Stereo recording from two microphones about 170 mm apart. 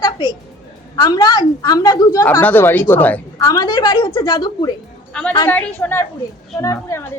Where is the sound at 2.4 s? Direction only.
10° left (ahead or behind).